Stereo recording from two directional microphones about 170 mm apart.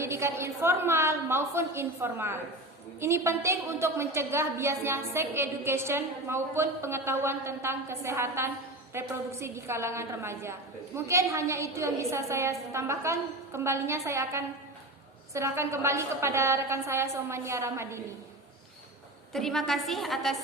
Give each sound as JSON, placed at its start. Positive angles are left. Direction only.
{"t": 0.0, "sound": "a woman's voice", "side_deg": -15}
{"t": 19.3, "sound": "a woman's voice", "side_deg": 0}